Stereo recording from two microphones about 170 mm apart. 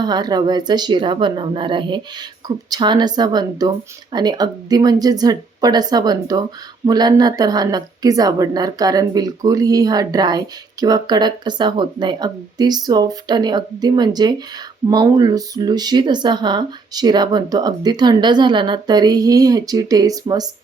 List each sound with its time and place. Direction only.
0.0 s a woman's voice: 25° right (ahead or behind)